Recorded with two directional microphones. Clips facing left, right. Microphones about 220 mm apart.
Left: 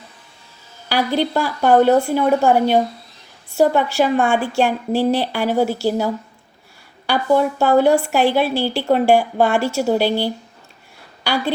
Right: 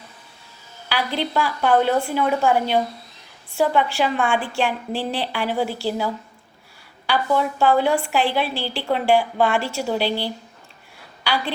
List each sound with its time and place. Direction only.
0.9 s a woman's voice: 45° left (ahead or behind)
7.1 s a woman's voice: 45° left (ahead or behind)